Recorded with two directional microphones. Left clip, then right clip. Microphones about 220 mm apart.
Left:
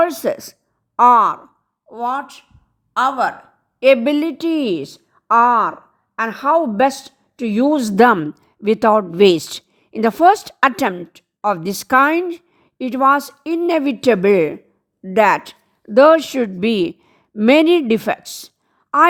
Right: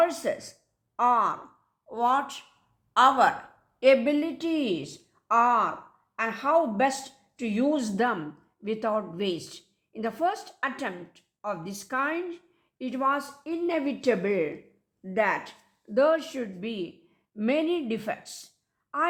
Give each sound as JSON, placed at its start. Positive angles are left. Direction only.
{"t": 0.0, "sound": "a woman's voice", "side_deg": 45}
{"t": 1.9, "sound": "a woman's voice", "side_deg": 20}
{"t": 3.8, "sound": "a woman's voice", "side_deg": 40}